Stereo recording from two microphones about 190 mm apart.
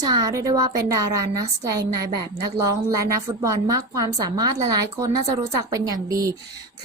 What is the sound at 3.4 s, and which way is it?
A woman's voice, 20° right (ahead or behind).